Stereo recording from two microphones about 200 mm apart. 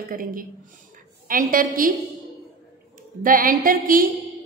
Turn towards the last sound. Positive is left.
turn(degrees=-45)  # may be behind; listen again after turning